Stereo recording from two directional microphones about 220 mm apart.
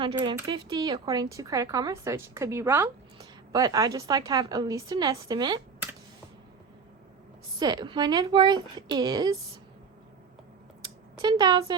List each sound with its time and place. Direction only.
0.0 s speech: 20° right (ahead or behind)
7.6 s speech: 20° right (ahead or behind)
10.8 s a sound: 20° right (ahead or behind)